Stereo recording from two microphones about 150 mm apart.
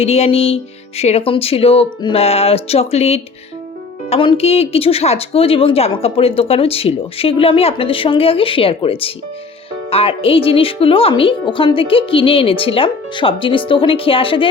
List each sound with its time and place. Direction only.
0.0 s a woman's voice: 45° left (ahead or behind)